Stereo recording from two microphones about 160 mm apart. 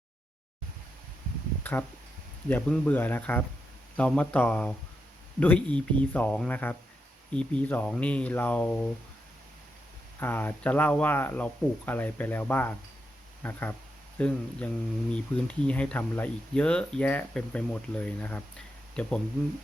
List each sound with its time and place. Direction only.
1.7 s speech: 10° left (ahead or behind)
10.2 s speech: 15° left (ahead or behind)